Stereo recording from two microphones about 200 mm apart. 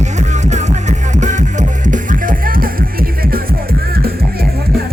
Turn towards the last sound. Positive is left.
turn(degrees=-50)  # may be behind; listen again after turning